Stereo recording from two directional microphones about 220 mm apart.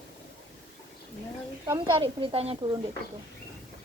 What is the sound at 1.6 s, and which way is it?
Speech, 20° right (ahead or behind).